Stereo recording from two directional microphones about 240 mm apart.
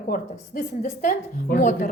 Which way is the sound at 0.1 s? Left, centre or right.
Left.